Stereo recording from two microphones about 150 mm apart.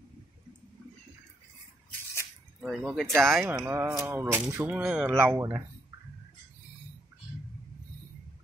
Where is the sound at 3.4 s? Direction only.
20° right (ahead or behind).